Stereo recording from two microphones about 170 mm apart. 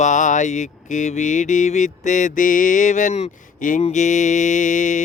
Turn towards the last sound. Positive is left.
turn(degrees=45)  # may be behind; listen again after turning